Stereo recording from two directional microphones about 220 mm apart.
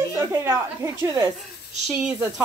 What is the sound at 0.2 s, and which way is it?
A woman's voice, 15° right (ahead or behind).